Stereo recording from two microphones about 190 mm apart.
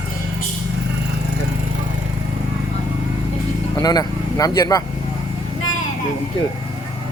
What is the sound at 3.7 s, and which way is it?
Speech, 20° left (ahead or behind).